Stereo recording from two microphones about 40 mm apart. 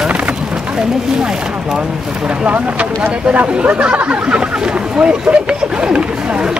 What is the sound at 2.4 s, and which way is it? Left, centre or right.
Speech, right.